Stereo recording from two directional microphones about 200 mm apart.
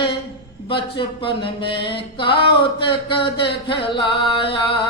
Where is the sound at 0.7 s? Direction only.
25° left (ahead or behind).